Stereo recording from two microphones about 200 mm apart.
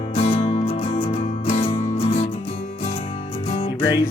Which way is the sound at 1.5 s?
30° left (ahead or behind).